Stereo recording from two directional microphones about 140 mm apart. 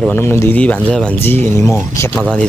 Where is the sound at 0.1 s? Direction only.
15° left (ahead or behind).